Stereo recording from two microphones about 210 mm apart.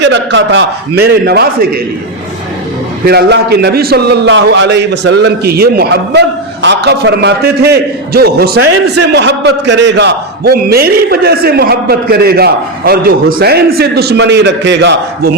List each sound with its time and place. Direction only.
0.0 s a man's voice: 55° right (ahead or behind)
3.1 s a man's voice: 50° right (ahead or behind)